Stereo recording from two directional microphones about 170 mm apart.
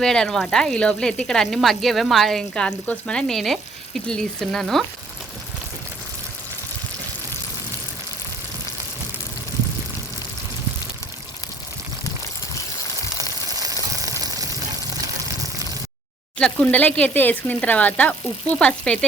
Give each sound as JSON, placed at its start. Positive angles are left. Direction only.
{"t": 0.0, "sound": "speech", "side_deg": 5}
{"t": 14.2, "sound": "sizzle", "side_deg": -20}
{"t": 16.4, "sound": "speech", "side_deg": 10}